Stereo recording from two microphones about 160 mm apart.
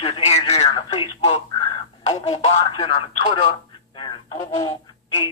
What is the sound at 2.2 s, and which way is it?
Speech, 45° left (ahead or behind).